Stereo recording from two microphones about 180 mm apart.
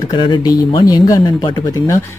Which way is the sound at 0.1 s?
25° left (ahead or behind).